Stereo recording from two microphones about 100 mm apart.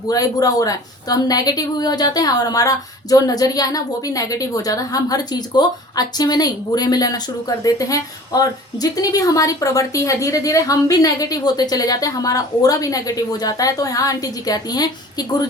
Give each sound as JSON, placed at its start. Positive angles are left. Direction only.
{"t": 0.1, "sound": "a woman's voice", "side_deg": 40}